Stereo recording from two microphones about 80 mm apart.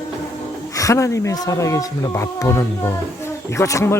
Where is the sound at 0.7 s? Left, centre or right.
Left.